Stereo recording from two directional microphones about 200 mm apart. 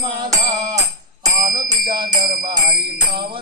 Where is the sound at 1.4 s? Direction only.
45° right (ahead or behind).